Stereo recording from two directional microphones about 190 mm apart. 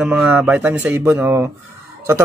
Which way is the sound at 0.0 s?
5° right (ahead or behind).